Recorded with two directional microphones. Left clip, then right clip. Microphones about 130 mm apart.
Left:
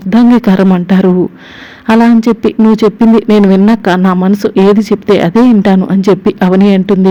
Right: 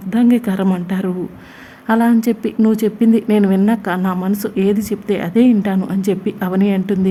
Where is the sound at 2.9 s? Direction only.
40° left (ahead or behind).